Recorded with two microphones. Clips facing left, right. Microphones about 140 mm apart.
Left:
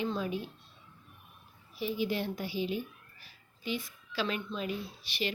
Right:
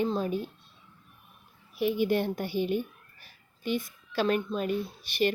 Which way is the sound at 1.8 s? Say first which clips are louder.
Right 6 dB; 60° right (ahead or behind).